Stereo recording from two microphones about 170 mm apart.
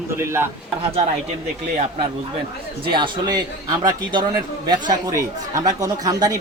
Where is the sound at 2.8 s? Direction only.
30° right (ahead or behind).